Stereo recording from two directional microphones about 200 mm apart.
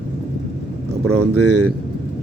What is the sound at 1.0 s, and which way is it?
Speech, 90° right.